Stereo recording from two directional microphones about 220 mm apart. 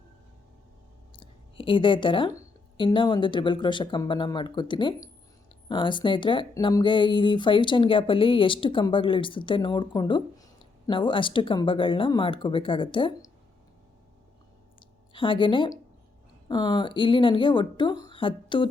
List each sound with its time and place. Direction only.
1.1 s clicking: 25° left (ahead or behind)
2.7 s speech: 20° left (ahead or behind)
15.1 s speech: 25° left (ahead or behind)